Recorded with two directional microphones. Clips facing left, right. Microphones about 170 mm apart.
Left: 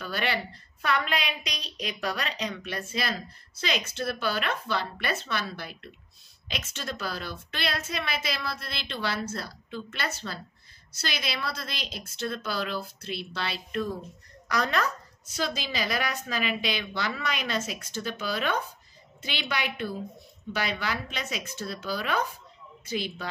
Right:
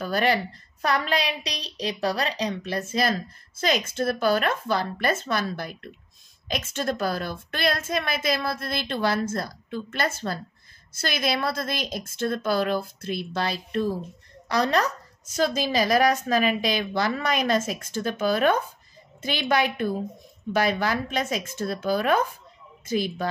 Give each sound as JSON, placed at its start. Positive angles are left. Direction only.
{"t": 0.0, "sound": "a woman's voice", "side_deg": -40}